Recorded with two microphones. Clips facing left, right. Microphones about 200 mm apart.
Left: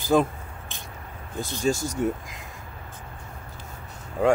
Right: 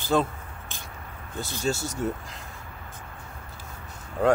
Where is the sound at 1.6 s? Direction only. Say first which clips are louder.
Left 4 dB; 15° left (ahead or behind).